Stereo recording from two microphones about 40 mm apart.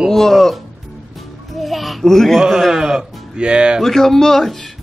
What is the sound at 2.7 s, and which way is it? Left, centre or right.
Speech, centre.